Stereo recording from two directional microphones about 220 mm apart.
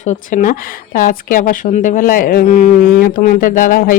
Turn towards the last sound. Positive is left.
turn(degrees=40)  # may be behind; listen again after turning